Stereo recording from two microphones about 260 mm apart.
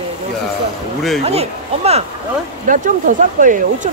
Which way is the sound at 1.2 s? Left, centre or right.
Right.